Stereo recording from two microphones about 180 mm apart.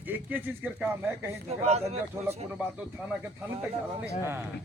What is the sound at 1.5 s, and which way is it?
Speech, 35° right (ahead or behind).